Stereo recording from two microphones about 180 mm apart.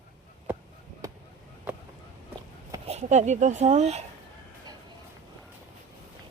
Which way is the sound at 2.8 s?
40° right (ahead or behind).